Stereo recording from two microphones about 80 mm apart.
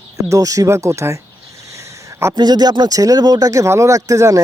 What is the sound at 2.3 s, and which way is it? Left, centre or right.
Speech, right.